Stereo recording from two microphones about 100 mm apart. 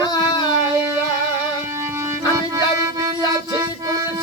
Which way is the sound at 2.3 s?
35° right (ahead or behind).